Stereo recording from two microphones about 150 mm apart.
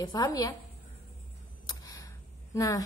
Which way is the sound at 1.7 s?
20° left (ahead or behind).